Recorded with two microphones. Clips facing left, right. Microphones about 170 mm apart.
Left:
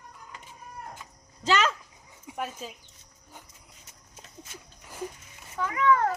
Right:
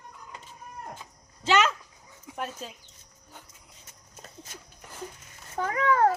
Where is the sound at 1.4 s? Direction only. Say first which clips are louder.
Right 2 dB; 40° left (ahead or behind).